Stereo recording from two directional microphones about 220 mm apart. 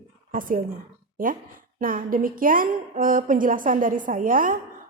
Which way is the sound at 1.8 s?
40° right (ahead or behind).